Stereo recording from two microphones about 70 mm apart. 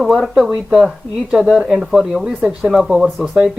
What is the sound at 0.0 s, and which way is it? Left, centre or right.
Speech, centre.